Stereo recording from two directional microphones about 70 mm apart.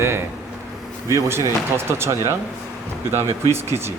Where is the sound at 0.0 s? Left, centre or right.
Right.